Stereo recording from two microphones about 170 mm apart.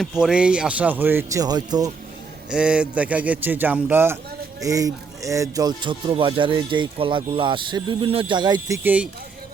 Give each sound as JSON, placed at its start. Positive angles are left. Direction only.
{"t": 0.0, "sound": "speech", "side_deg": -5}
{"t": 2.5, "sound": "speech", "side_deg": -5}